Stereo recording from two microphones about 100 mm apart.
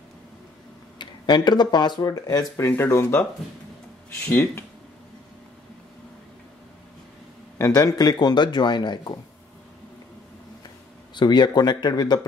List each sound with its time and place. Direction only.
0.9 s speech: 50° left (ahead or behind)
2.6 s speech: 25° left (ahead or behind)
4.3 s speech: 25° left (ahead or behind)
7.5 s speech: 35° left (ahead or behind)
11.1 s speech: 45° left (ahead or behind)